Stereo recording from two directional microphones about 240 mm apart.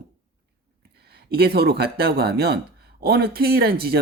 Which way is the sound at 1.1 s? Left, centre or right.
Right.